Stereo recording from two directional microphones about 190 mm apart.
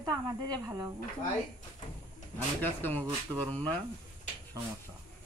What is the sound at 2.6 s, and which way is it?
Speech, 10° left (ahead or behind).